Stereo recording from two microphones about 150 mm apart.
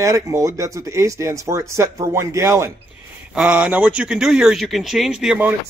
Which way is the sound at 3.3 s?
10° right (ahead or behind).